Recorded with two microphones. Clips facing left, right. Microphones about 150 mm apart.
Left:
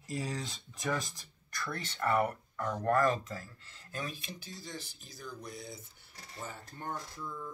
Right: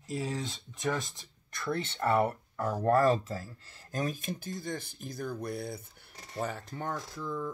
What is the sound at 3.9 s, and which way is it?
Speech, 45° right (ahead or behind).